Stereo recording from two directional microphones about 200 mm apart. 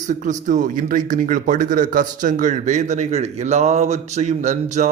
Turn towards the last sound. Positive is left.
turn(degrees=-35)  # may be behind; listen again after turning